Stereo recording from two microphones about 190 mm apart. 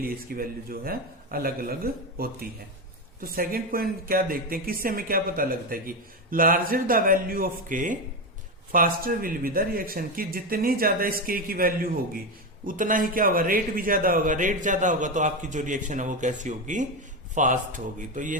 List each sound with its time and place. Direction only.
0.0 s a man's voice: 50° right (ahead or behind)